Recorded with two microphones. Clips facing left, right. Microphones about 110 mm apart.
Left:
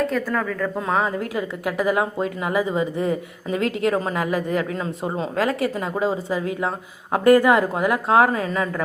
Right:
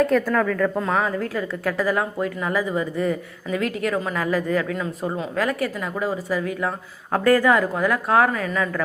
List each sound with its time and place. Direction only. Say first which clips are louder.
0.1 s speech: right 4 dB; 5° left (ahead or behind)
0.9 s a woman's voice: even; 20° left (ahead or behind)